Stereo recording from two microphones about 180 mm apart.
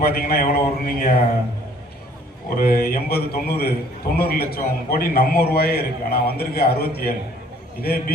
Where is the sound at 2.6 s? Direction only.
55° left (ahead or behind).